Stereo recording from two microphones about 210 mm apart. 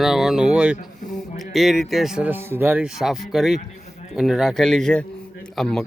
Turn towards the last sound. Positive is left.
turn(degrees=0)  # may be behind; listen again after turning